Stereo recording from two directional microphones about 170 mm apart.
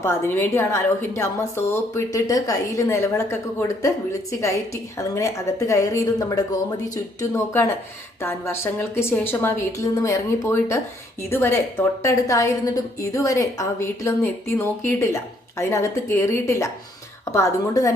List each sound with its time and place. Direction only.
0.0 s a woman's voice: 15° left (ahead or behind)